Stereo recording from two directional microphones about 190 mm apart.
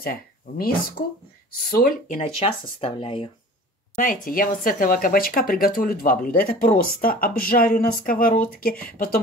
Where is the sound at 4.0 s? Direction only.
45° left (ahead or behind).